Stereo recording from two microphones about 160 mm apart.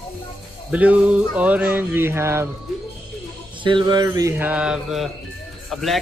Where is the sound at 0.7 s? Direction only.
10° right (ahead or behind).